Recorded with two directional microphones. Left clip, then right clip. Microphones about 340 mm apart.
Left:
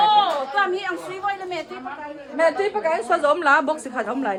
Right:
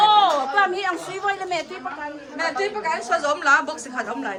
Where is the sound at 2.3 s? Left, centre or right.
Centre.